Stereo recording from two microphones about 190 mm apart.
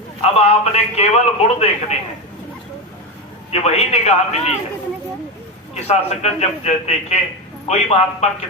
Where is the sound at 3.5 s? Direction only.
35° left (ahead or behind).